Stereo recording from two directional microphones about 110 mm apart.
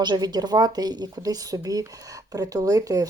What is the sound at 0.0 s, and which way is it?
Speech, 40° right (ahead or behind).